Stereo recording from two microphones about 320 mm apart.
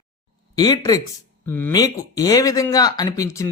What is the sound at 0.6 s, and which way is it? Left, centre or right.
Speech, centre.